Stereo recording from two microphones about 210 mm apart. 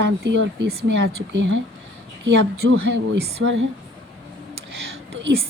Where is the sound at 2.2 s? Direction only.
65° right (ahead or behind).